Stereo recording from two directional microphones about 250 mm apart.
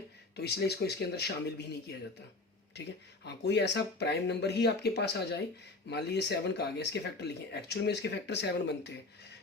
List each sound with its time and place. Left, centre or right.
0.3 s speech: left
3.2 s speech: left